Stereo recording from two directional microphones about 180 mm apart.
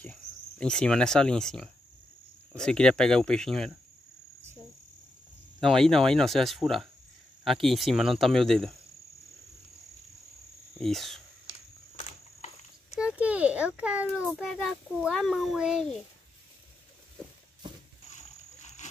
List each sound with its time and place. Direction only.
0.0 s a child's voice: 5° left (ahead or behind)
5.6 s a child's voice: centre (ahead or behind)
10.8 s a child's voice: centre (ahead or behind)
12.0 s a sound: 40° left (ahead or behind)
12.9 s a sound: 5° right (ahead or behind)
14.2 s a child's voice: centre (ahead or behind)
18.1 s dog: 40° left (ahead or behind)